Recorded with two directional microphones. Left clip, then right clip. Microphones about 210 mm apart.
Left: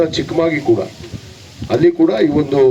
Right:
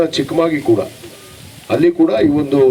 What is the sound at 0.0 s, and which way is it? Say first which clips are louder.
Speech: even; 55° right (ahead or behind).